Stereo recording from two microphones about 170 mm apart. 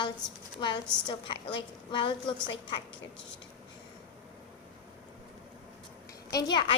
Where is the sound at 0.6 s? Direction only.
25° left (ahead or behind).